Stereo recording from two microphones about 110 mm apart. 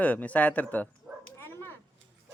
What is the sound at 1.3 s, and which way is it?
Dog, 20° left (ahead or behind).